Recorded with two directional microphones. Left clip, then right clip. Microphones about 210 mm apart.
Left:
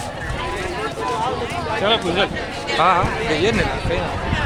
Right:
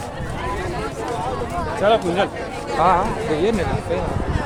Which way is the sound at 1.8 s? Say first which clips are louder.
Right 2 dB; 60° right (ahead or behind).